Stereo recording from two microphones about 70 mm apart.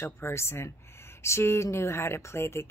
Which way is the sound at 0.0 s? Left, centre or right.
Left.